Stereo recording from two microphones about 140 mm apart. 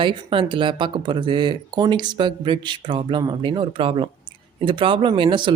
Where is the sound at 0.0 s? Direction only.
35° right (ahead or behind).